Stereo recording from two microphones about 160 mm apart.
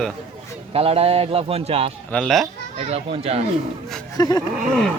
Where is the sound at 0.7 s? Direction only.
35° right (ahead or behind).